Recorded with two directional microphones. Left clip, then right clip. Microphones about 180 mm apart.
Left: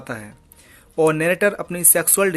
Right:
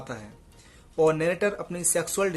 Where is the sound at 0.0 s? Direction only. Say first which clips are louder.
Left 7 dB; 30° left (ahead or behind).